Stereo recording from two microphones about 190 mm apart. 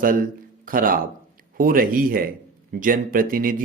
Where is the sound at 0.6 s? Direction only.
50° right (ahead or behind).